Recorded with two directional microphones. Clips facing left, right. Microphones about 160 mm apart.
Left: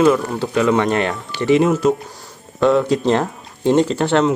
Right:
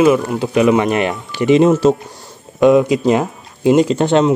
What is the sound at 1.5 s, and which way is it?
Speech, 20° right (ahead or behind).